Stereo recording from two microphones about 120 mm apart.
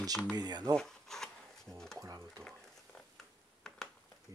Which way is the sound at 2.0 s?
30° right (ahead or behind).